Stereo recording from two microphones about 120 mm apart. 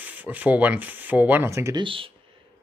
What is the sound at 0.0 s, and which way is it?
Speech, 15° right (ahead or behind).